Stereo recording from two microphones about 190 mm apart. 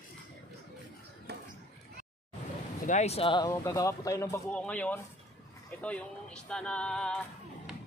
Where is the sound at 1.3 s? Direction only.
60° right (ahead or behind).